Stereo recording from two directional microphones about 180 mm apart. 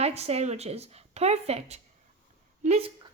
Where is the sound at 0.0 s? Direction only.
35° right (ahead or behind).